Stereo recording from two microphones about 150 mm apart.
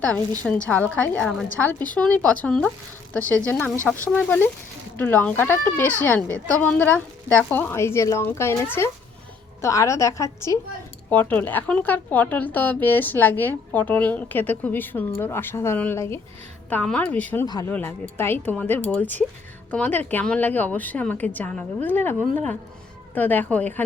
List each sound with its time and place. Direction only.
0.0 s a woman's voice: 10° left (ahead or behind)
17.4 s a woman's voice: 25° left (ahead or behind)
17.7 s a woman's voice: 10° left (ahead or behind)
23.1 s a woman's voice: 10° left (ahead or behind)